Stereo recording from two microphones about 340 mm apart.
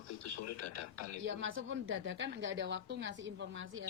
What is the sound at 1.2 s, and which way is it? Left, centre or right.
A woman's voice, right.